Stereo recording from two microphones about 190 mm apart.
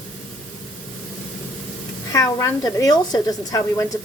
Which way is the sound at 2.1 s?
15° left (ahead or behind).